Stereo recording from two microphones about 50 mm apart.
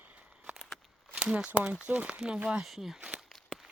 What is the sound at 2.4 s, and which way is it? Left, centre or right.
Speech, centre.